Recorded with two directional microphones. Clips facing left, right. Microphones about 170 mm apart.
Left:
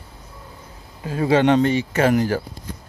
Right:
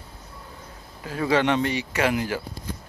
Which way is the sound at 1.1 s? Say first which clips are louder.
Left 5 dB; 25° left (ahead or behind).